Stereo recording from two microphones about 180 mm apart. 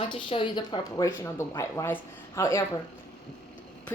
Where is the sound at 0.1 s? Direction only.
30° left (ahead or behind).